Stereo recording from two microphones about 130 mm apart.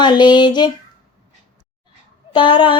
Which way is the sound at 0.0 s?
35° left (ahead or behind).